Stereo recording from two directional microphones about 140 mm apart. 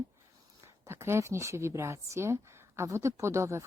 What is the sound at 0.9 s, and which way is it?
A woman's voice, 20° right (ahead or behind).